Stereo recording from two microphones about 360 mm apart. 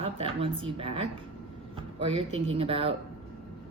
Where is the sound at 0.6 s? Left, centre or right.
Centre.